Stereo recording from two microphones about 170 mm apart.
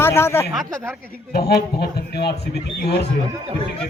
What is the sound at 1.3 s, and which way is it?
A man's voice, 70° left (ahead or behind).